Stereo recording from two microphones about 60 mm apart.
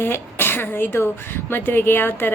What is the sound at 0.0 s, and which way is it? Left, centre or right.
Speech, left.